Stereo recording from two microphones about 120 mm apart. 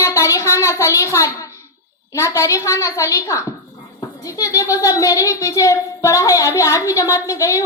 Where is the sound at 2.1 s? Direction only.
25° left (ahead or behind).